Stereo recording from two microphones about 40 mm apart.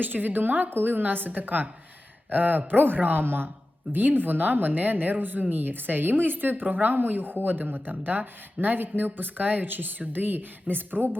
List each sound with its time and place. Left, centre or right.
0.0 s a woman's voice: right
3.9 s a woman's voice: right